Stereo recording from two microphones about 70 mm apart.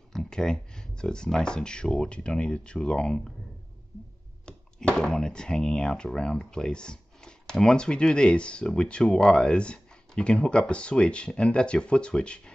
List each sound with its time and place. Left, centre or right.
0.1 s speech: centre
4.5 s speech: centre